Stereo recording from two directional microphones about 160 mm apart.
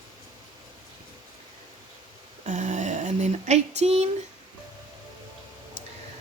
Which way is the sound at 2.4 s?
50° right (ahead or behind).